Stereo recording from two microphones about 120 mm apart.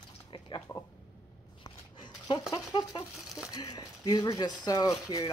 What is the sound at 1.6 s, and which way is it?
Dog, 40° left (ahead or behind).